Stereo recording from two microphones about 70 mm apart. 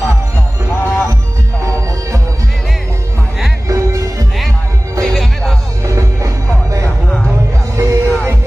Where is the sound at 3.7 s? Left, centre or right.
Right.